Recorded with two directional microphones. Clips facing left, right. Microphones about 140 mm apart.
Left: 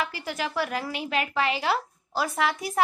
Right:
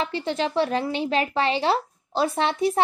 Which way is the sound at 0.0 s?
30° right (ahead or behind).